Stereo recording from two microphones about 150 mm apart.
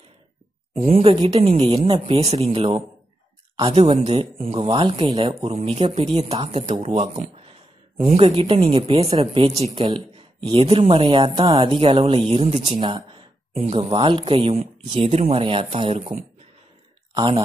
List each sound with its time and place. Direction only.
1.2 s speech: 45° right (ahead or behind)
13.9 s speech: 30° right (ahead or behind)